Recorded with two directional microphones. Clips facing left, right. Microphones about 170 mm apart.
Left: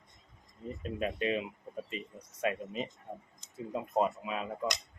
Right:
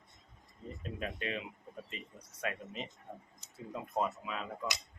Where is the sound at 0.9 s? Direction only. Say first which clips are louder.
Left 7 dB; 20° left (ahead or behind).